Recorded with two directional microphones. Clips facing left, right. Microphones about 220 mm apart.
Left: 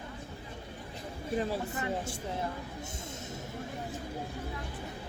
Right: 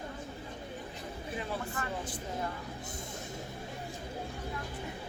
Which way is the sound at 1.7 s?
20° left (ahead or behind).